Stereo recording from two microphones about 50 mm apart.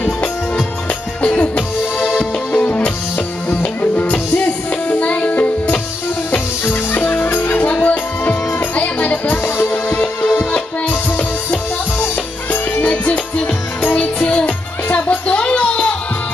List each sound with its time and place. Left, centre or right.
0.0 s music: left
3.9 s music: left
6.6 s music: left
9.3 s music: left
10.9 s music: left